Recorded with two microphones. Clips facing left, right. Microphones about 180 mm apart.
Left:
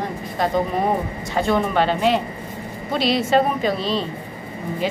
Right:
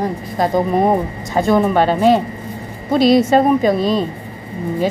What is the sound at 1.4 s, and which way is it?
A woman's voice, 40° right (ahead or behind).